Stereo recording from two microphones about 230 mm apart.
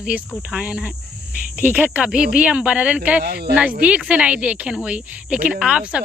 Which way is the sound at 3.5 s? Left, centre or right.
Centre.